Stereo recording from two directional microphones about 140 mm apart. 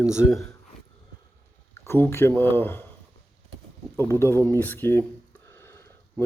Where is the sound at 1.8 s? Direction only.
15° left (ahead or behind).